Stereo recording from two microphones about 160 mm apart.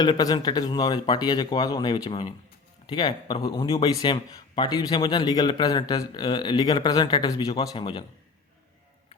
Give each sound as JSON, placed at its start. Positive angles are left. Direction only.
{"t": 0.0, "sound": "speech", "side_deg": 25}